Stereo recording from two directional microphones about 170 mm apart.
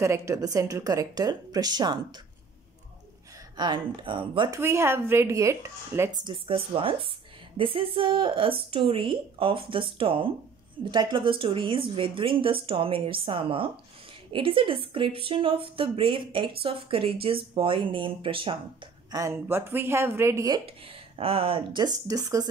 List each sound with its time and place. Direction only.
0.0 s a woman's voice: 15° right (ahead or behind)
3.5 s a woman's voice: 25° right (ahead or behind)
4.6 s a woman's voice: 15° right (ahead or behind); by 18.6 s 30° right (ahead or behind)
19.1 s speech: 15° right (ahead or behind)
20.6 s a woman's voice: 35° right (ahead or behind)